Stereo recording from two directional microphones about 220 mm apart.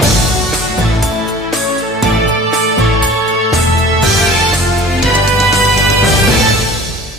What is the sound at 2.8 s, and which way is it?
Music, centre (ahead or behind).